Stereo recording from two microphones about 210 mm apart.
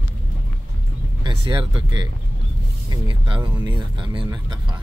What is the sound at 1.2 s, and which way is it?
Speech, 20° right (ahead or behind).